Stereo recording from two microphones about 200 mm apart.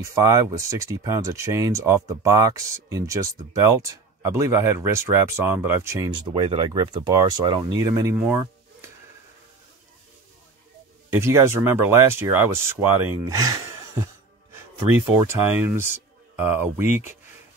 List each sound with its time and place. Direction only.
0.0 s speech: 15° right (ahead or behind)
11.1 s speech: 15° right (ahead or behind)
15.2 s speech: 10° right (ahead or behind)